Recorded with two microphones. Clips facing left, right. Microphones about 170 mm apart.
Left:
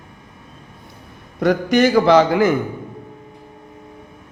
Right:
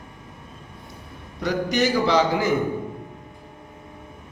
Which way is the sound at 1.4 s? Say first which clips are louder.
Left 7 dB; 55° left (ahead or behind).